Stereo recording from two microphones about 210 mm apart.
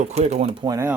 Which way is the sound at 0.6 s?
15° right (ahead or behind).